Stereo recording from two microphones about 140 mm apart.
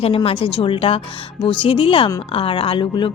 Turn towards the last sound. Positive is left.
turn(degrees=35)  # may be behind; listen again after turning